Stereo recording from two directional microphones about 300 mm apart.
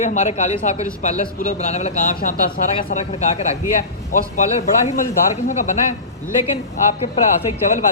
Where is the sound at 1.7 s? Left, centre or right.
Left.